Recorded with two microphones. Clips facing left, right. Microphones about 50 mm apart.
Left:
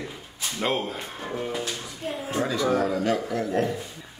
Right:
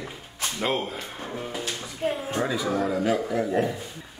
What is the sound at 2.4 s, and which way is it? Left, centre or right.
A man's voice, centre.